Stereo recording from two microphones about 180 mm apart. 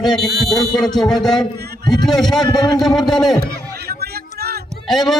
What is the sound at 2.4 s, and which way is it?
Speech, 25° left (ahead or behind).